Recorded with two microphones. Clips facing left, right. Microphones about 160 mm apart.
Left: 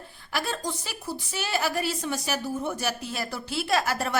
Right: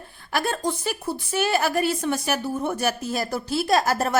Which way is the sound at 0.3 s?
55° right (ahead or behind).